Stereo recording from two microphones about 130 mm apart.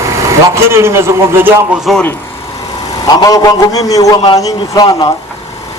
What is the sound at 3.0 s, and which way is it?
A man's voice, 30° left (ahead or behind).